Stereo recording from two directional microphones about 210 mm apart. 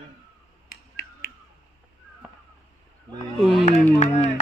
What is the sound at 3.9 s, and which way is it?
Speech, 35° left (ahead or behind).